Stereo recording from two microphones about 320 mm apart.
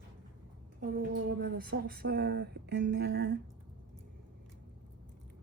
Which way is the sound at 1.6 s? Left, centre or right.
Right.